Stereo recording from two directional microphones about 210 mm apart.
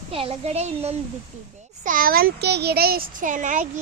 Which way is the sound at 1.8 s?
40° right (ahead or behind).